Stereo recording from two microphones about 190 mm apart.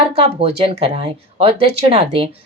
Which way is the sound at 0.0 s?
30° right (ahead or behind).